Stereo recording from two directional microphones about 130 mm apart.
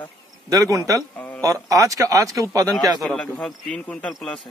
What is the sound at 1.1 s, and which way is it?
Speech, 10° left (ahead or behind).